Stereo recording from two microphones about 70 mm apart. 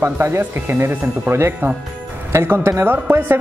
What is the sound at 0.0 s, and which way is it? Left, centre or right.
A woman's voice, right.